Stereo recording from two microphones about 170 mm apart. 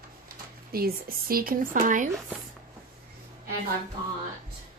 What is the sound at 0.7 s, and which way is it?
Speech, 65° right (ahead or behind).